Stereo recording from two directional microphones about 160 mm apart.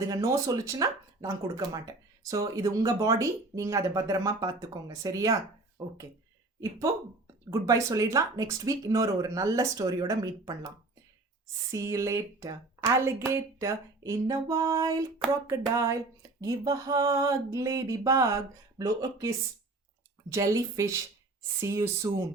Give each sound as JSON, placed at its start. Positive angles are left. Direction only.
{"t": 0.0, "sound": "speech", "side_deg": -20}
{"t": 11.7, "sound": "speech", "side_deg": -20}
{"t": 15.2, "sound": "a sound", "side_deg": 5}
{"t": 15.7, "sound": "speech", "side_deg": -20}
{"t": 20.3, "sound": "speech", "side_deg": -20}